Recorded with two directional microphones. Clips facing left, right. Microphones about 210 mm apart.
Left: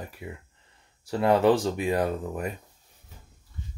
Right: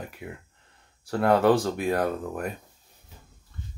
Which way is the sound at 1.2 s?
15° left (ahead or behind).